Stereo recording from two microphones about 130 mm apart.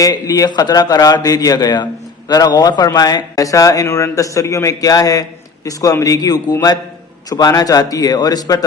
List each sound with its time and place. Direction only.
0.0 s a man's voice: 25° left (ahead or behind)